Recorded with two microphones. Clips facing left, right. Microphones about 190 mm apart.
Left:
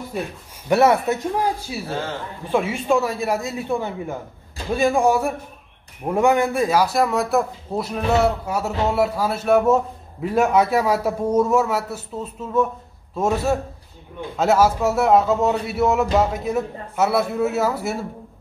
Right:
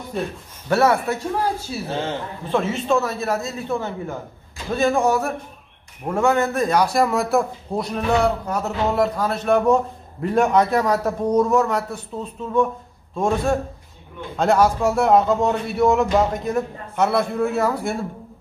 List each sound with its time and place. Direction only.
0.1 s a man's voice: 10° left (ahead or behind)